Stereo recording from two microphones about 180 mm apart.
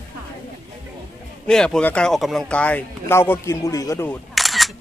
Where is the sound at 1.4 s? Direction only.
5° left (ahead or behind).